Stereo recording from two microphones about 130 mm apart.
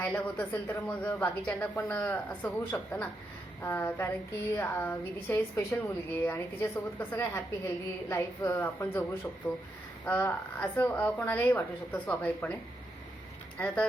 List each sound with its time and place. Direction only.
0.0 s speech: 10° left (ahead or behind)
13.6 s speech: 10° left (ahead or behind)